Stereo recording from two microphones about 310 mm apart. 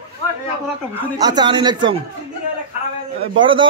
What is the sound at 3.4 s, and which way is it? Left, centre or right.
Speech, centre.